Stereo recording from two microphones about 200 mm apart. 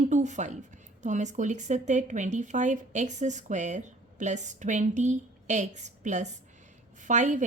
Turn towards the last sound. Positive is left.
turn(degrees=-40)  # may be behind; listen again after turning